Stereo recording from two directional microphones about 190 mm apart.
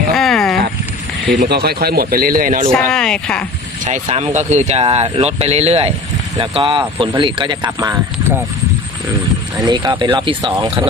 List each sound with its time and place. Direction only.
0.1 s rowboat: centre (ahead or behind)
1.2 s speech: 60° right (ahead or behind); by 2.6 s 45° right (ahead or behind)
2.7 s speech: 5° left (ahead or behind)
3.8 s speech: 40° right (ahead or behind); by 7.9 s 20° right (ahead or behind)
9.6 s speech: 20° right (ahead or behind)